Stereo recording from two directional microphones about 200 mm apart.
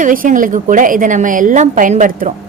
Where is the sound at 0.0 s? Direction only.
40° right (ahead or behind).